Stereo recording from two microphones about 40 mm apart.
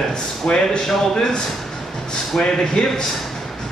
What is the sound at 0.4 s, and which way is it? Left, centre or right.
Speech, left.